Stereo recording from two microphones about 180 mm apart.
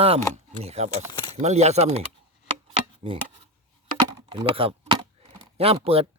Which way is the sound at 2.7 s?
30° right (ahead or behind).